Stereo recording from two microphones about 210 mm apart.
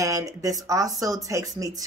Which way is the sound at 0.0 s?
15° right (ahead or behind).